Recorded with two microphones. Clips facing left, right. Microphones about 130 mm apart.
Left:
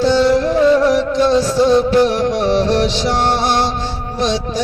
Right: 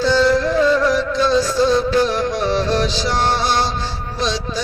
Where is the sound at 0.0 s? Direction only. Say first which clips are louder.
Left 3 dB; 65° left (ahead or behind).